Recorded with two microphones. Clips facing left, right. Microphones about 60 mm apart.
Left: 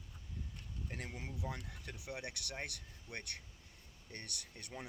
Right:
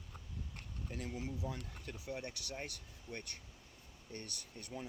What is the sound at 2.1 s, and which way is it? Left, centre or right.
Speech, left.